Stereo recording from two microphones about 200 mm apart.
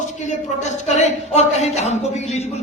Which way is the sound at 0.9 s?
35° left (ahead or behind).